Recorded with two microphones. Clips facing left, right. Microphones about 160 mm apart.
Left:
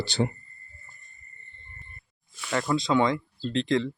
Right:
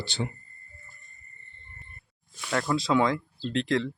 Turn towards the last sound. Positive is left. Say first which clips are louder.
# left 1 dB
turn(degrees=0)  # may be behind; listen again after turning